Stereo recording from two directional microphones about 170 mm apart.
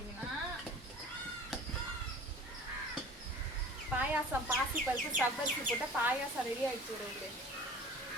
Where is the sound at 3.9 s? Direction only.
10° right (ahead or behind).